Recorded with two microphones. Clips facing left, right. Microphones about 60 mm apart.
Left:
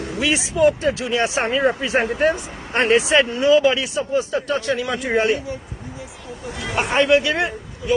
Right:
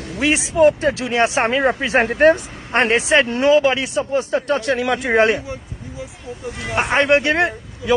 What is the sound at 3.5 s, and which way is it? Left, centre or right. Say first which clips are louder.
Speech: right 1 dB; right.